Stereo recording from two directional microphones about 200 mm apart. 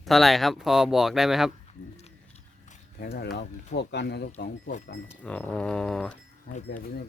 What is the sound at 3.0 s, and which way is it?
Speech, 55° left (ahead or behind).